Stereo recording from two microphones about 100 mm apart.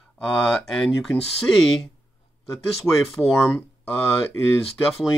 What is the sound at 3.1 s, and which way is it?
Speech, 5° left (ahead or behind).